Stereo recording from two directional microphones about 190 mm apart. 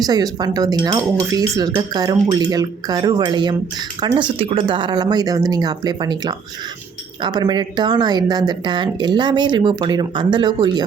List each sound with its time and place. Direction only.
0.0 s speech: 20° right (ahead or behind)